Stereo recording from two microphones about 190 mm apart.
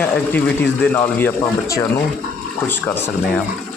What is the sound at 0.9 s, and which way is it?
Speech, 15° left (ahead or behind).